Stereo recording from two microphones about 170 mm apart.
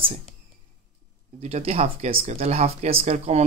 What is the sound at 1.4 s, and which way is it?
Speech, 40° right (ahead or behind).